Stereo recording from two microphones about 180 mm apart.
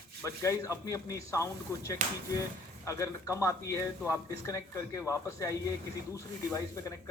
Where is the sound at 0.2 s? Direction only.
15° left (ahead or behind).